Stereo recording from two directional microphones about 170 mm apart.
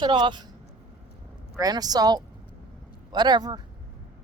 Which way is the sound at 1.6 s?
20° right (ahead or behind).